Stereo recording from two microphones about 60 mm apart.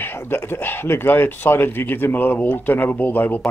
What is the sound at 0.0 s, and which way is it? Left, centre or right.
Speech, left.